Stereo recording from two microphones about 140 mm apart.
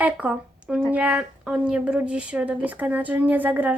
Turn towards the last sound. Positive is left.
turn(degrees=-10)  # may be behind; listen again after turning